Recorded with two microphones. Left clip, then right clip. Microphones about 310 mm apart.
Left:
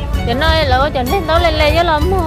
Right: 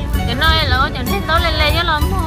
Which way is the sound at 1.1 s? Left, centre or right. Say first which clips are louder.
Left 3 dB; centre.